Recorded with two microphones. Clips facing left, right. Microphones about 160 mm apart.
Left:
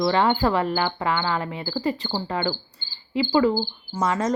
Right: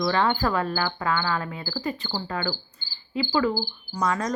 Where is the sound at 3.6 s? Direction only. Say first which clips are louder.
Left 2 dB; 20° left (ahead or behind).